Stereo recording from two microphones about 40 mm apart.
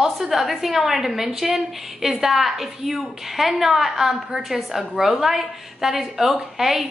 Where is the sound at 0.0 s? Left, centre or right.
Centre.